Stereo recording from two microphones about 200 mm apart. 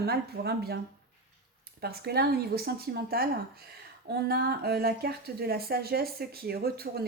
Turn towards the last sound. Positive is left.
turn(degrees=-50)  # may be behind; listen again after turning